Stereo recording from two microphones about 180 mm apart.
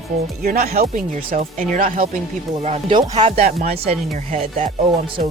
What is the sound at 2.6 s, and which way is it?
Speech, 30° right (ahead or behind).